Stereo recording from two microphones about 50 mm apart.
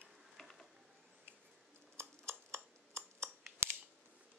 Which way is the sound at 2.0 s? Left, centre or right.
Right.